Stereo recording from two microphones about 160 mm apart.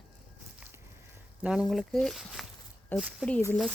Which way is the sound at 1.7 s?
Centre (ahead or behind).